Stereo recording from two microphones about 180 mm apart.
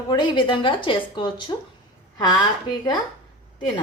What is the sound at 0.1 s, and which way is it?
Speech, 25° left (ahead or behind).